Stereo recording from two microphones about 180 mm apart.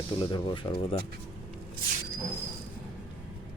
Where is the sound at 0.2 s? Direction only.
25° left (ahead or behind).